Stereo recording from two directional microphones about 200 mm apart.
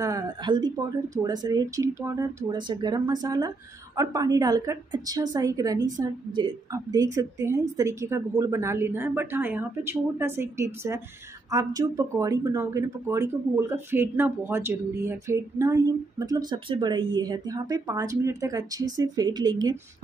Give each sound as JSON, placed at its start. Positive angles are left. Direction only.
{"t": 0.0, "sound": "a woman's voice", "side_deg": -20}